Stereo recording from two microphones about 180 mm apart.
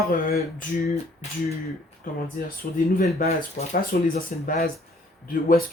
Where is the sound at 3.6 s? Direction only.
45° left (ahead or behind).